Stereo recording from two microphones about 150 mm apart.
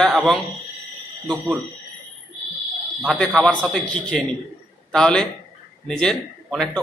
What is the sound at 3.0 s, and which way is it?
A man's voice, centre (ahead or behind).